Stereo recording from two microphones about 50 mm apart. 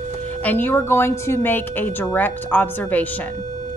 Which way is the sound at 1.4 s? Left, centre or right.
Left.